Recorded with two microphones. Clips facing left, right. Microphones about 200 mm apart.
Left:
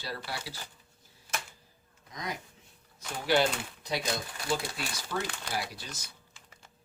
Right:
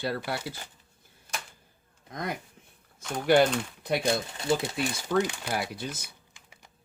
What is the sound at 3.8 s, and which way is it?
Speech, 55° right (ahead or behind).